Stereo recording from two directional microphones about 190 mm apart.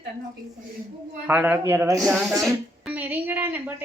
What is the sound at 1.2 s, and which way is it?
Speech, 10° right (ahead or behind).